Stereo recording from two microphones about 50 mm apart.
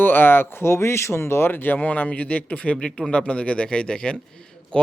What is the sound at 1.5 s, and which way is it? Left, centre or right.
Speech, left.